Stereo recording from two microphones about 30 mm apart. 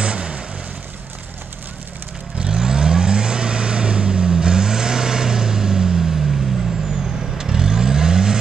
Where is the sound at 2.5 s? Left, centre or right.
Right.